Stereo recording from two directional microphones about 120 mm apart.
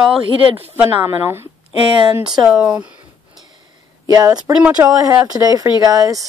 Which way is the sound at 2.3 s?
5° right (ahead or behind).